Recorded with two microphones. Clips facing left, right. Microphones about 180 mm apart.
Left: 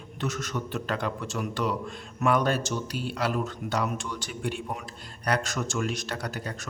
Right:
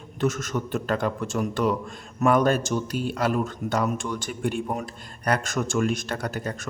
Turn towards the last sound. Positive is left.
turn(degrees=-50)  # may be behind; listen again after turning